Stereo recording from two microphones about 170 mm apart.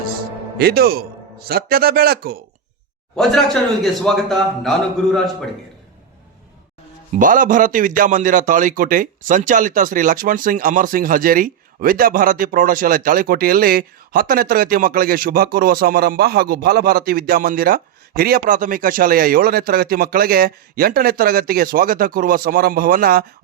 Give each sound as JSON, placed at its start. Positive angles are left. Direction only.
{"t": 0.6, "sound": "speech", "side_deg": -65}
{"t": 3.2, "sound": "a man's voice", "side_deg": 0}
{"t": 7.2, "sound": "speech", "side_deg": -50}